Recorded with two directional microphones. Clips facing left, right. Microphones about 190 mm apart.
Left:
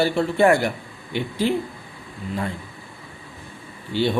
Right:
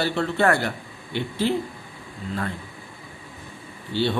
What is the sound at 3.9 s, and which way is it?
Speech, 15° left (ahead or behind).